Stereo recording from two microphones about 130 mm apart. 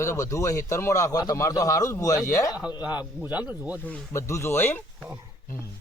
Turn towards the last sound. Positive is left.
turn(degrees=15)  # may be behind; listen again after turning